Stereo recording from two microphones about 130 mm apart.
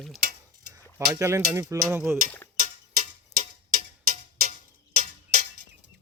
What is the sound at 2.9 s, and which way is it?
Clock, 80° right.